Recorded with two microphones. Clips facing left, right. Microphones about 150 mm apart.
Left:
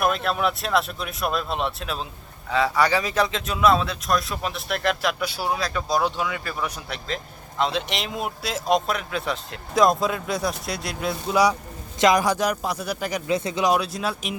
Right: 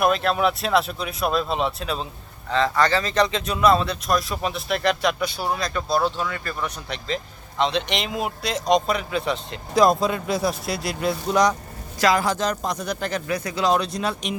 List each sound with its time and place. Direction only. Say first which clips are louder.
0.0 s speech: right 3 dB; centre (ahead or behind)
11.9 s speech: left 1 dB; 20° left (ahead or behind)
13.3 s speech: left 4 dB; 25° left (ahead or behind)
13.7 s speech: right 2 dB; 5° left (ahead or behind)